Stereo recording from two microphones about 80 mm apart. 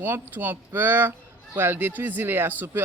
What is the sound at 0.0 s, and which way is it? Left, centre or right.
Speech, right.